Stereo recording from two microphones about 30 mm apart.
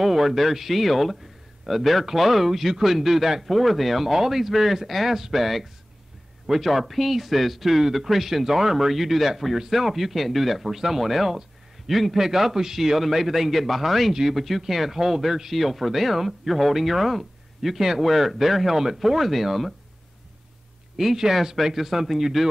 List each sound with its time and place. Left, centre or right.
0.0 s speech: centre
4.1 s speech: centre
12.2 s speech: centre
15.5 s speech: centre
21.0 s speech: centre